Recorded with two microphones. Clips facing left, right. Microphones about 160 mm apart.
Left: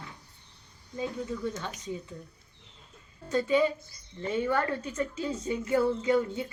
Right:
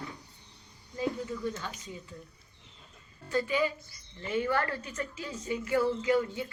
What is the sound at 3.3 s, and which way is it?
A woman's voice, 25° left (ahead or behind).